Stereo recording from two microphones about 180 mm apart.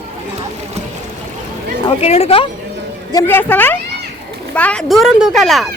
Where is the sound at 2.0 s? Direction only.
35° left (ahead or behind).